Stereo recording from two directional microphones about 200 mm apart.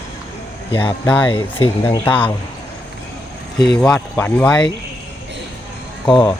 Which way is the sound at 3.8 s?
5° left (ahead or behind).